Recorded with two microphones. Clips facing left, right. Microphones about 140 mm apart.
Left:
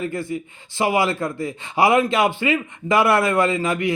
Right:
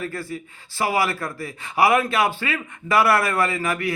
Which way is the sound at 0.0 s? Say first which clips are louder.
Left 4 dB; 20° left (ahead or behind).